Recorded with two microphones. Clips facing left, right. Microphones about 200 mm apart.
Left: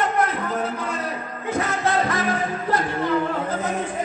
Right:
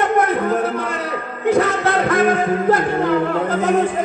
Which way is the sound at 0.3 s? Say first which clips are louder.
Right 7 dB; 60° right (ahead or behind).